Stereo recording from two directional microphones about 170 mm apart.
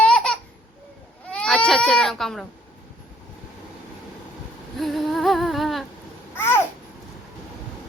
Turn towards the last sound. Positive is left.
turn(degrees=15)  # may be behind; listen again after turning